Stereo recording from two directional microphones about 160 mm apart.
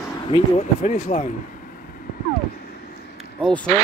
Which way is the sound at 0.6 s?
45° left (ahead or behind).